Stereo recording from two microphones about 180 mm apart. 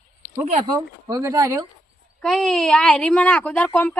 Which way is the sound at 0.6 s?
20° right (ahead or behind).